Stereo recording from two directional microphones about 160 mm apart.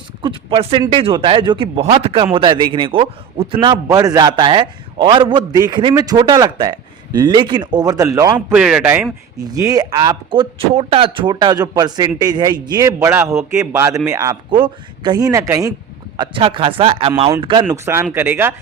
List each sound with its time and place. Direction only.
0.2 s a man's voice: 35° right (ahead or behind)
8.5 s speech: 5° right (ahead or behind)
9.5 s a man's voice: 25° right (ahead or behind)
14.5 s a man's voice: 30° right (ahead or behind)
16.1 s speech: 30° right (ahead or behind)
17.7 s speech: 15° right (ahead or behind)